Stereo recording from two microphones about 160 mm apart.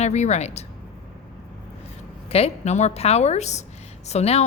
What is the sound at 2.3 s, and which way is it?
A woman's voice, 40° left (ahead or behind).